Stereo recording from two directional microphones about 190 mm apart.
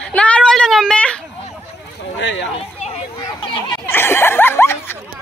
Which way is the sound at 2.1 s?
70° left (ahead or behind).